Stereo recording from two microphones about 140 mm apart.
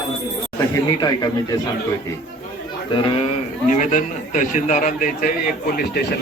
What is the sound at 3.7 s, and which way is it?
A man's voice, 65° left (ahead or behind).